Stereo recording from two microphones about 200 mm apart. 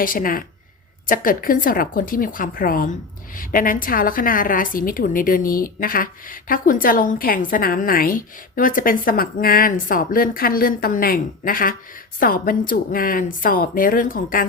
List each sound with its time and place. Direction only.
0.0 s speech: 45° left (ahead or behind)